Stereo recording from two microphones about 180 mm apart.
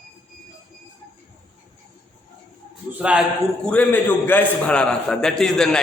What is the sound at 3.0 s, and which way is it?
Speech, 5° right (ahead or behind).